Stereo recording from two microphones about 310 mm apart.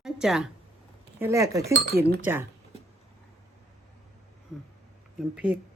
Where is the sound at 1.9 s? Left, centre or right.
Right.